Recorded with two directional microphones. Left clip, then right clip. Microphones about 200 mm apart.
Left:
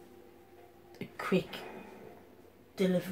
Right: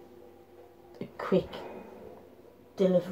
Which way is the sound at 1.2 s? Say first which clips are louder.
Right 4 dB; 20° left (ahead or behind).